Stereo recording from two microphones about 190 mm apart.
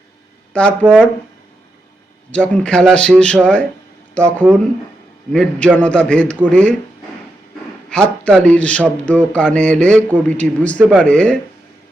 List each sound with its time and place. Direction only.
0.5 s speech: 5° left (ahead or behind)
2.3 s a man's voice: 5° left (ahead or behind)
7.9 s a man's voice: 5° left (ahead or behind)
10.8 s speech: 5° right (ahead or behind)
11.0 s speech: 5° left (ahead or behind)